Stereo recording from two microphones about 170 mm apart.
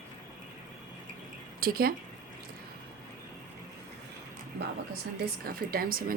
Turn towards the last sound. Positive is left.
turn(degrees=-60)  # may be behind; listen again after turning